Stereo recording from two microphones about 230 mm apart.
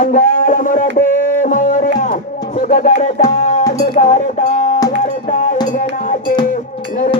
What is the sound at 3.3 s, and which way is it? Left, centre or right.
Music, left.